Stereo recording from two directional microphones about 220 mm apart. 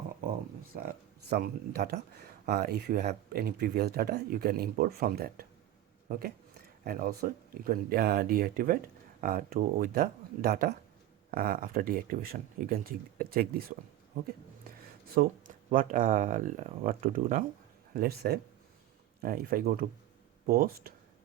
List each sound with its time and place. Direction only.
1.3 s speech: 45° right (ahead or behind)
15.1 s speech: 40° right (ahead or behind)